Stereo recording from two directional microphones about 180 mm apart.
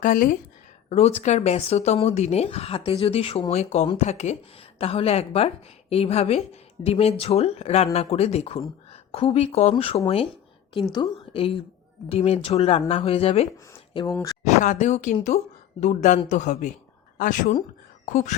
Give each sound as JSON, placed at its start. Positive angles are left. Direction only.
{"t": 0.0, "sound": "speech", "side_deg": 50}
{"t": 0.9, "sound": "a woman's voice", "side_deg": 35}
{"t": 14.1, "sound": "speech", "side_deg": 15}
{"t": 14.4, "sound": "speech", "side_deg": 40}